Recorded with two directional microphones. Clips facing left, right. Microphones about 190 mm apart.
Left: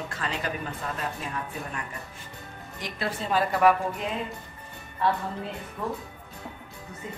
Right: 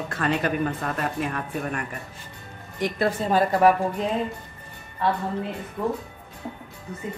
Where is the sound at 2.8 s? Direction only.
50° right (ahead or behind).